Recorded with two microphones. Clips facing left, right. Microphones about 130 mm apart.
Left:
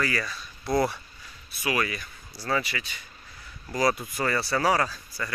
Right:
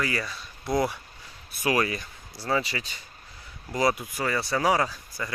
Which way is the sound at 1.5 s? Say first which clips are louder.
Right 3 dB; 45° right (ahead or behind).